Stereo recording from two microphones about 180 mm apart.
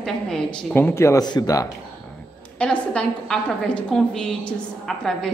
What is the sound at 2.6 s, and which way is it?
A woman's voice, 5° left (ahead or behind).